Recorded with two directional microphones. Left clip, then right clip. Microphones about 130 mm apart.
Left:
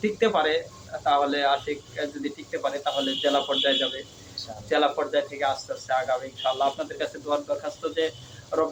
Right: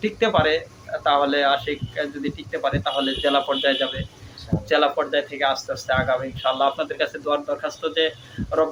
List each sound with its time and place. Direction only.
0.0 s speech: 25° right (ahead or behind)